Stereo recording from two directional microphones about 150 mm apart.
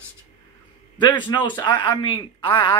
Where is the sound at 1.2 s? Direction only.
30° left (ahead or behind).